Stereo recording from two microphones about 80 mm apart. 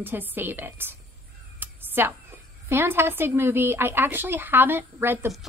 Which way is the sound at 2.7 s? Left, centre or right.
Right.